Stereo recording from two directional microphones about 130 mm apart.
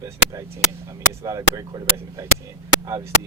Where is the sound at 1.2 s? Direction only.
25° right (ahead or behind).